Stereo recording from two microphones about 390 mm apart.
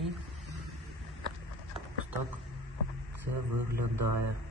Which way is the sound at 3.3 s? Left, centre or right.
Right.